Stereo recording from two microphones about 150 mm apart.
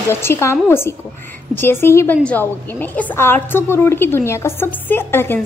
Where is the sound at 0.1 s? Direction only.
15° left (ahead or behind).